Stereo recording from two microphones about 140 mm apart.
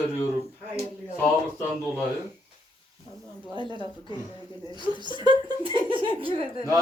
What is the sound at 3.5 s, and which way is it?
Speech, 35° right (ahead or behind).